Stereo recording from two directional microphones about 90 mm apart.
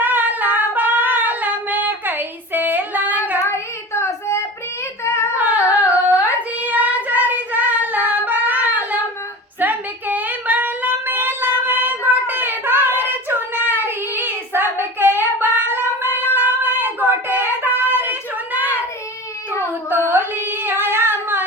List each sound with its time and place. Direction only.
0.0 s singing: 20° right (ahead or behind)
3.4 s child singing: 30° left (ahead or behind)
5.3 s a sound: 15° right (ahead or behind)
13.8 s child singing: 25° right (ahead or behind)
15.4 s a sound: 25° right (ahead or behind)
20.1 s singing: 25° right (ahead or behind)